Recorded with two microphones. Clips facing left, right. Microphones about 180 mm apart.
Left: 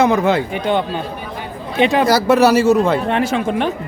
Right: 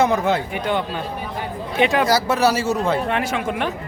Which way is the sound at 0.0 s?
90° left.